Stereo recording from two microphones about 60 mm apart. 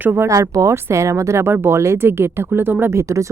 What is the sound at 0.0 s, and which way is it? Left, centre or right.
Speech, right.